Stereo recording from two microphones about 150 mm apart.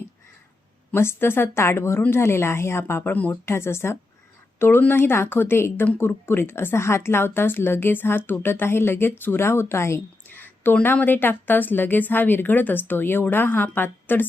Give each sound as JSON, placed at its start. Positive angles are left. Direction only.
{"t": 0.9, "sound": "speech", "side_deg": 15}